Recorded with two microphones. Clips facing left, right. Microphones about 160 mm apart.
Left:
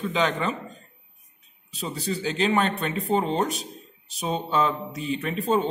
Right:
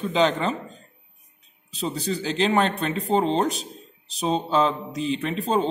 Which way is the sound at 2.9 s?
30° right (ahead or behind).